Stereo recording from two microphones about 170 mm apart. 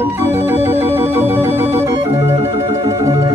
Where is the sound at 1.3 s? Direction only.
15° right (ahead or behind).